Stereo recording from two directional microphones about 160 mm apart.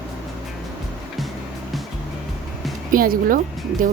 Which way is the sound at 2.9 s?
60° right (ahead or behind).